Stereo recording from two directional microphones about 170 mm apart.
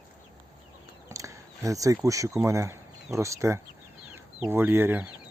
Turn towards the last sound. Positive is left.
turn(degrees=-10)  # may be behind; listen again after turning